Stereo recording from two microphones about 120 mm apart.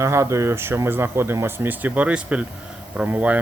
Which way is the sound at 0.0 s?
25° right (ahead or behind).